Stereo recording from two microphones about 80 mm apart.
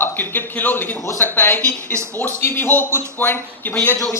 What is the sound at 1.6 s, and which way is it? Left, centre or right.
Speech, right.